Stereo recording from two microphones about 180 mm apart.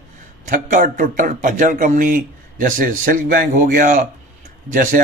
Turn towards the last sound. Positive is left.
turn(degrees=-50)  # may be behind; listen again after turning